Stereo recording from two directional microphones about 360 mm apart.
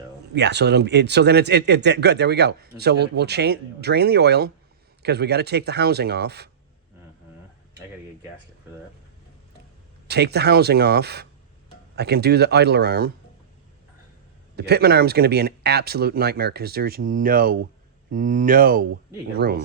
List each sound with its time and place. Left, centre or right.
0.3 s speech: right
10.1 s speech: right
14.5 s speech: right